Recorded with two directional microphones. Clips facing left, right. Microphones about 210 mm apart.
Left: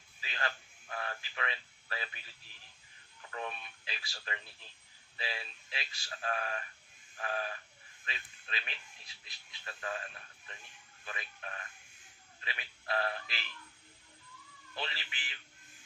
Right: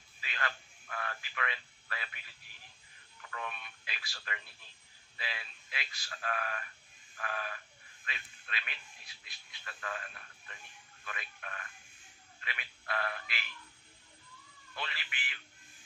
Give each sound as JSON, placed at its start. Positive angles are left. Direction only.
{"t": 0.2, "sound": "a sound", "side_deg": 30}
{"t": 3.3, "sound": "speech", "side_deg": 30}
{"t": 11.0, "sound": "speech", "side_deg": 30}
{"t": 14.8, "sound": "speech", "side_deg": 25}